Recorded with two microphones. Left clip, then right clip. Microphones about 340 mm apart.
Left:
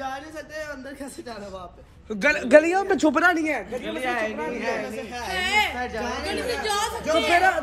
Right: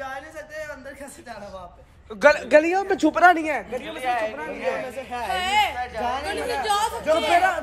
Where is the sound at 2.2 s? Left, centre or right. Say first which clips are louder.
Right 1 dB; centre.